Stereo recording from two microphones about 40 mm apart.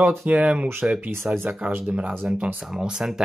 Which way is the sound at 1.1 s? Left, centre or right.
Right.